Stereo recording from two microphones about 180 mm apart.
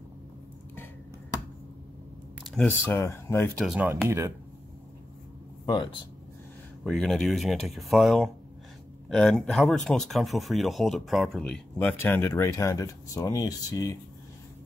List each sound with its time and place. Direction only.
2.4 s computer keyboard: 5° left (ahead or behind)
2.8 s speech: 15° left (ahead or behind)
3.5 s speech: 5° right (ahead or behind)
5.7 s speech: 25° left (ahead or behind)
6.8 s speech: centre (ahead or behind); by 13.9 s 20° left (ahead or behind)